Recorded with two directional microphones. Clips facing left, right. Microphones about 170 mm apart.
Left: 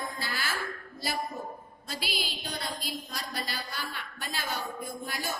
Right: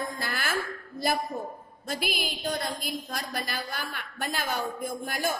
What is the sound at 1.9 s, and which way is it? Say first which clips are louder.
A woman's voice: right 5 dB; 50° right (ahead or behind).